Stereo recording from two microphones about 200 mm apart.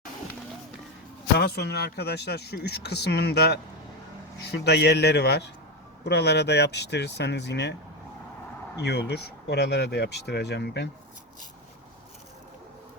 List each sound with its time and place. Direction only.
1.4 s speech: 55° left (ahead or behind)
8.8 s speech: 55° left (ahead or behind)